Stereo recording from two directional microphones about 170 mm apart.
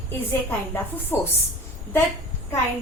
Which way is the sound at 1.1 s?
15° left (ahead or behind).